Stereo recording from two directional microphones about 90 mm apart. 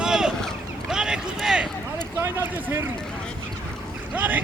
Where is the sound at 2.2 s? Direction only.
25° right (ahead or behind).